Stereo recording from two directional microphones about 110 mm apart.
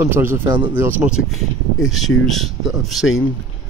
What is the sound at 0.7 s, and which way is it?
Speech, 25° right (ahead or behind).